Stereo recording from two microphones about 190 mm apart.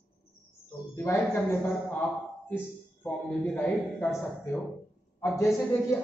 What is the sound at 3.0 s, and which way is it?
A man's voice, 10° left (ahead or behind).